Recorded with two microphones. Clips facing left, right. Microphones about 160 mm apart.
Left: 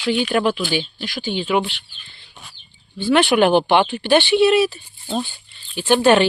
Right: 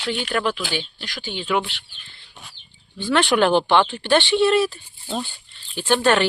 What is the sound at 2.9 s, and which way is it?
Speech, 10° left (ahead or behind).